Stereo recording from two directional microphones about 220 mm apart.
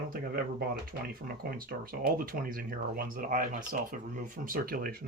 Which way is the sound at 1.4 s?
40° right (ahead or behind).